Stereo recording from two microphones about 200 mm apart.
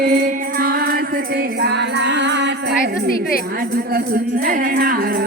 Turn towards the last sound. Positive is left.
turn(degrees=-45)  # may be behind; listen again after turning